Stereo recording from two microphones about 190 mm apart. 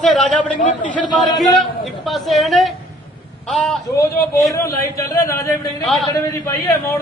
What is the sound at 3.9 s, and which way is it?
A man's voice, 15° left (ahead or behind).